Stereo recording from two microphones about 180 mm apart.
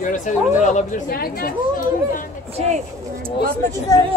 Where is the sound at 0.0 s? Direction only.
45° left (ahead or behind).